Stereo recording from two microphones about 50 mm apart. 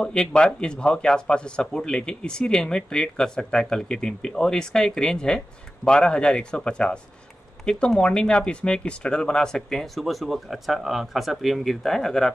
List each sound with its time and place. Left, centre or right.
0.0 s speech: centre